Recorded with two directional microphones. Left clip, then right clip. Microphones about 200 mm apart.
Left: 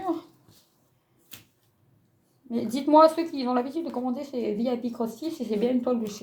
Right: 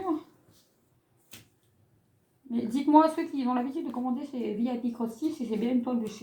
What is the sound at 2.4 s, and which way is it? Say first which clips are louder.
A woman's voice: left 3 dB; 50° left (ahead or behind).